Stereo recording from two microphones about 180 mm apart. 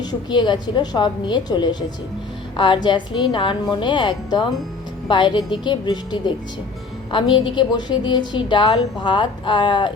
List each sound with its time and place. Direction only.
0.0 s a woman's voice: 25° left (ahead or behind)